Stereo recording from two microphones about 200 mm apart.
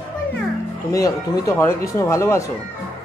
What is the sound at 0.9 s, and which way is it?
Speech, 15° left (ahead or behind).